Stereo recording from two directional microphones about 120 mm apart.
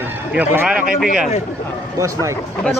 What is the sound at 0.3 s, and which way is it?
Speech, 15° right (ahead or behind).